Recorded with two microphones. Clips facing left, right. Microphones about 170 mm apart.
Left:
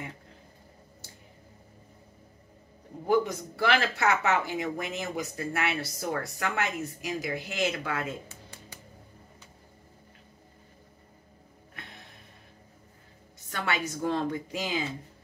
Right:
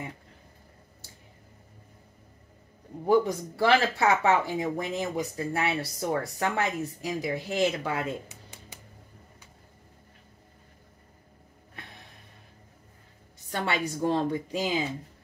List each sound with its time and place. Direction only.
3.1 s speech: 30° right (ahead or behind)
8.3 s a sound: 20° right (ahead or behind)
13.5 s speech: 30° right (ahead or behind)